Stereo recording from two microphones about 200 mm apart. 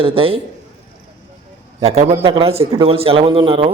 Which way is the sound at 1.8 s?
30° right (ahead or behind).